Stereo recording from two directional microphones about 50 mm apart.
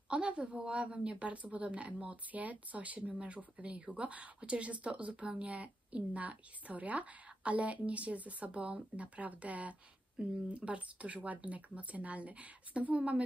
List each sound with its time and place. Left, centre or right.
0.1 s speech: right